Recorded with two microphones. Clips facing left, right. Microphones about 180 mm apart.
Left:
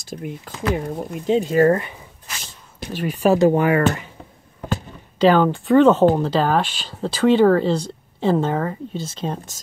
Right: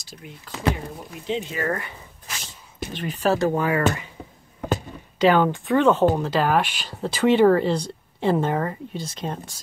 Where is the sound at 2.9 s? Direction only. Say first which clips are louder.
Left 5 dB; 10° left (ahead or behind).